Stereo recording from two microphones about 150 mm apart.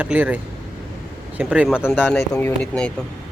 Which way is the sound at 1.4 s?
10° right (ahead or behind).